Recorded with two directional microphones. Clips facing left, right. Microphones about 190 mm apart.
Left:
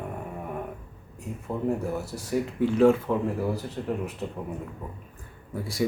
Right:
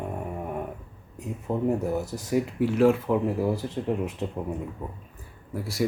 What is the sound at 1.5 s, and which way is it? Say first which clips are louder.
Speech: right 4 dB; 25° right (ahead or behind).